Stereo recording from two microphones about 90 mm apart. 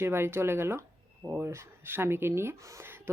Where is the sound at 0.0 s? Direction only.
25° right (ahead or behind).